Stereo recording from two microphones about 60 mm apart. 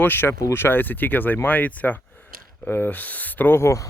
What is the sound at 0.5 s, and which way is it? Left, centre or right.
Speech, left.